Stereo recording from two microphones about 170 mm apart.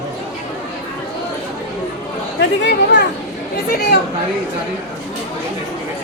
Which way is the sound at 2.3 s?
90° left.